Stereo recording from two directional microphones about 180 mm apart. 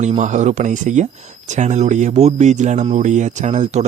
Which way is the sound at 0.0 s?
40° right (ahead or behind).